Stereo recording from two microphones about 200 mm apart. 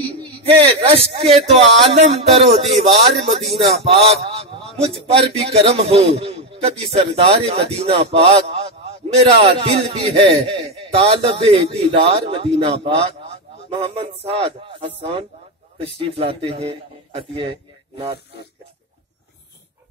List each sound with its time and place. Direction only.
0.5 s a man's voice: 25° right (ahead or behind)